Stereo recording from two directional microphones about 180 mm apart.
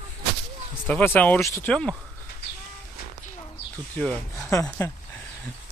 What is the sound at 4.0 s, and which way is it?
Speech, 10° left (ahead or behind).